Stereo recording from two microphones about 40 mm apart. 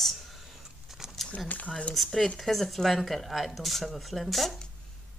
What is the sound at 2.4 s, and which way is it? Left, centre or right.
A woman's voice, centre.